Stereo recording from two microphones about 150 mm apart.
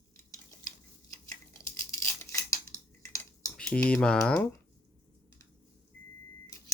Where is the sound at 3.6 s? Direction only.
5° left (ahead or behind).